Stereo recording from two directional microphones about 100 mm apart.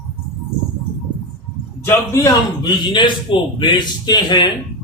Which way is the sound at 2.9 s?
50° left (ahead or behind).